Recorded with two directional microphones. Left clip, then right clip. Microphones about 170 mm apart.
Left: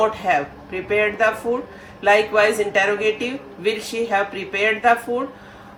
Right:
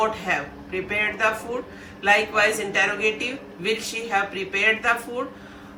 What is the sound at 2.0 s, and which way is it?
Speech, 55° left (ahead or behind).